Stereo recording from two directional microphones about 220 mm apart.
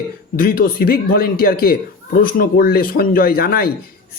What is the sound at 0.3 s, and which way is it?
Speech, 40° left (ahead or behind).